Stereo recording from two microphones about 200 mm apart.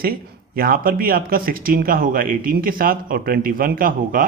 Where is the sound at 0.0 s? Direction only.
50° right (ahead or behind).